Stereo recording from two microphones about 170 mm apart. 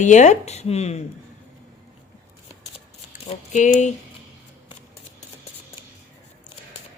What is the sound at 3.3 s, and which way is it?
Speech, 45° left (ahead or behind).